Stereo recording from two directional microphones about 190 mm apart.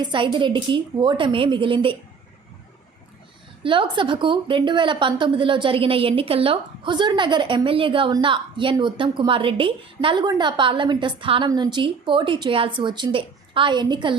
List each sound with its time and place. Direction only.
0.0 s a woman's voice: 25° right (ahead or behind)
3.6 s a woman's voice: 25° right (ahead or behind)